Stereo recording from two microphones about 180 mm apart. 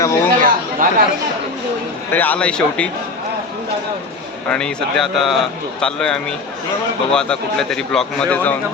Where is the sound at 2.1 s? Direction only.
10° left (ahead or behind).